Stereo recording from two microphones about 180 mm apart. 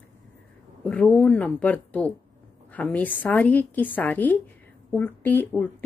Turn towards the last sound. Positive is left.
turn(degrees=10)  # may be behind; listen again after turning